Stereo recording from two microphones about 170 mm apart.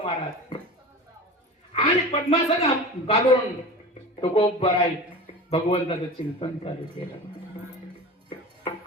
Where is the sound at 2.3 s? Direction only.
35° left (ahead or behind).